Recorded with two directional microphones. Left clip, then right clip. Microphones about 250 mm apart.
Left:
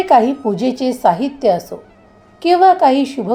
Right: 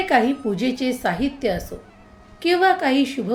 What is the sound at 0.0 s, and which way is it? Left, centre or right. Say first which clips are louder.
A woman's voice: left 7 dB; centre.